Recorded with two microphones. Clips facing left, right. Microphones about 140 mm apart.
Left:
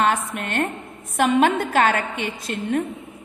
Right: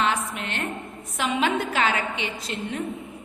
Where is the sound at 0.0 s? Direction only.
50° left (ahead or behind).